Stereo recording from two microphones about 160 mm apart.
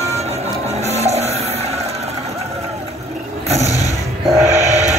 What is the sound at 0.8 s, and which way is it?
Music, 45° right (ahead or behind).